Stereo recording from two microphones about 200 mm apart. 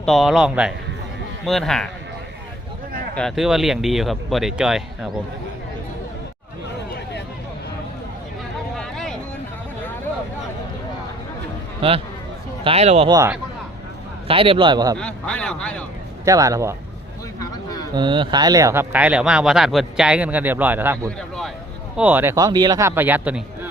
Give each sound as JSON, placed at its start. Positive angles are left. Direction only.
{"t": 0.0, "sound": "speech", "side_deg": 0}
{"t": 3.2, "sound": "speech", "side_deg": 0}
{"t": 8.7, "sound": "a sound", "side_deg": 5}
{"t": 11.8, "sound": "a man's voice", "side_deg": -30}
{"t": 13.1, "sound": "speech", "side_deg": -15}
{"t": 14.3, "sound": "a man's voice", "side_deg": -25}
{"t": 14.9, "sound": "speech", "side_deg": 5}
{"t": 16.2, "sound": "speech", "side_deg": -15}
{"t": 17.4, "sound": "a sound", "side_deg": 20}
{"t": 17.9, "sound": "speech", "side_deg": -25}
{"t": 21.2, "sound": "speech", "side_deg": 0}
{"t": 21.9, "sound": "speech", "side_deg": -10}